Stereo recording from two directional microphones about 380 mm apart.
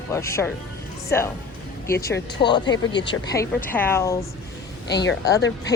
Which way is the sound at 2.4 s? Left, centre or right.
Centre.